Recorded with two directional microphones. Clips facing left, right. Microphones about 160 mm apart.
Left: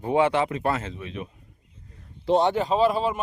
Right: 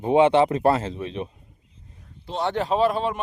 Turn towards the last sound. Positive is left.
turn(degrees=0)  # may be behind; listen again after turning